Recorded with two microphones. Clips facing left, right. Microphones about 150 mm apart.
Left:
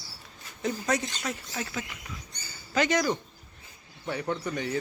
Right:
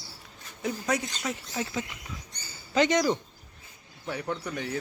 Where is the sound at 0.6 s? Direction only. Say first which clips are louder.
Left 1 dB; 5° right (ahead or behind); by 3.1 s 20° right (ahead or behind).